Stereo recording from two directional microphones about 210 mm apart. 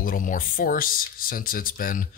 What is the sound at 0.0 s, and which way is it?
Speech, 40° left (ahead or behind).